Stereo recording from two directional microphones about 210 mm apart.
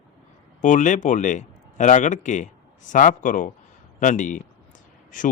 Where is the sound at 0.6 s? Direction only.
35° left (ahead or behind).